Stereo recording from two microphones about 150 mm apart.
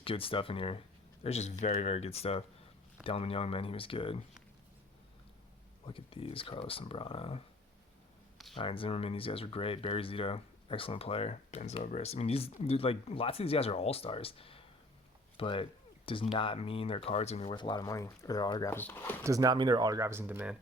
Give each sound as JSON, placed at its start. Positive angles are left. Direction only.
{"t": 0.0, "sound": "speech", "side_deg": 35}
{"t": 5.8, "sound": "speech", "side_deg": 35}
{"t": 8.5, "sound": "speech", "side_deg": 35}
{"t": 18.7, "sound": "speech", "side_deg": 15}
{"t": 19.2, "sound": "speech", "side_deg": -25}